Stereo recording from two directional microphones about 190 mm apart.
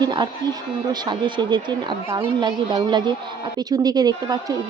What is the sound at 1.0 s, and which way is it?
Speech, 25° right (ahead or behind).